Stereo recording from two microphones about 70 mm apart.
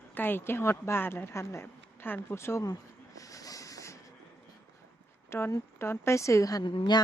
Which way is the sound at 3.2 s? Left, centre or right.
Left.